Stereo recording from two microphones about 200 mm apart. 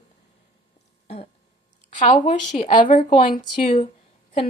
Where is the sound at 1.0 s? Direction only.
30° left (ahead or behind).